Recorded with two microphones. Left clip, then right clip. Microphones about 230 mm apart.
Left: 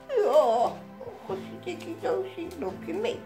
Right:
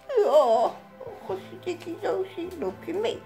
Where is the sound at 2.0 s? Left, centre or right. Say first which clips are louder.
Right 1 dB; right.